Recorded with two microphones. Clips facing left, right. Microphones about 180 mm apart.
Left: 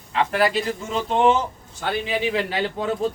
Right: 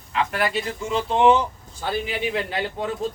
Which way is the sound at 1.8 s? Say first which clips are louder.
Left 2 dB; 75° left (ahead or behind).